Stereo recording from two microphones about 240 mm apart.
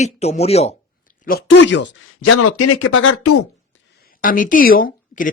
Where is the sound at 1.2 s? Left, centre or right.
Left.